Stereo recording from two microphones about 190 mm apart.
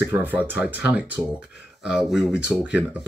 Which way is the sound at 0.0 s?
10° right (ahead or behind).